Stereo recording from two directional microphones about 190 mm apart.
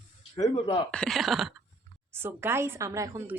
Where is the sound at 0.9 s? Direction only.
5° left (ahead or behind).